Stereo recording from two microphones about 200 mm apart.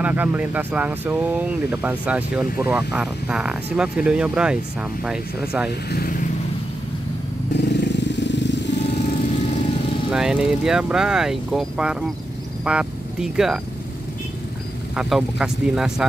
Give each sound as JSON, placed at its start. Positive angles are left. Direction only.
{"t": 0.0, "sound": "speech", "side_deg": -10}
{"t": 5.9, "sound": "speech", "side_deg": 45}
{"t": 7.5, "sound": "vehicle", "side_deg": 55}
{"t": 10.1, "sound": "speech", "side_deg": -5}
{"t": 15.0, "sound": "speech", "side_deg": 0}